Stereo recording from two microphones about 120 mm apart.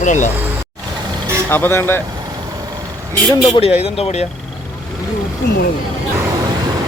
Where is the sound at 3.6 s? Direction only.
60° left (ahead or behind).